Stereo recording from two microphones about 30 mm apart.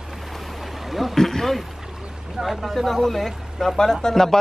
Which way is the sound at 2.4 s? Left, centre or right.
Centre.